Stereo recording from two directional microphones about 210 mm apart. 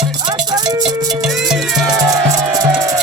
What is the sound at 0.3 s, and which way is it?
Music, 20° right (ahead or behind).